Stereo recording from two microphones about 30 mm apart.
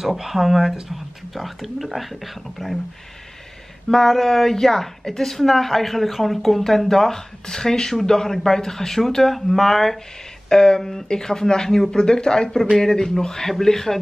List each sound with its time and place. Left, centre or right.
0.0 s speech: centre
3.9 s a woman's voice: centre
7.1 s a woman's voice: centre
10.5 s a woman's voice: left